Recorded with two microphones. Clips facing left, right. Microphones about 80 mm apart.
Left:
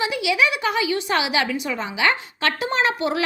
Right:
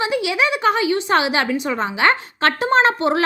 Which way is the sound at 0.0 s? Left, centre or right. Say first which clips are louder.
Right 1 dB; right.